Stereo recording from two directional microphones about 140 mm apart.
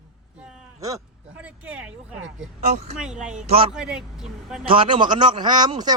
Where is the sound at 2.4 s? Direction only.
60° right (ahead or behind).